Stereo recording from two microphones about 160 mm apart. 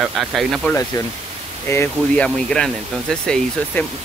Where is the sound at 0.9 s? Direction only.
25° left (ahead or behind).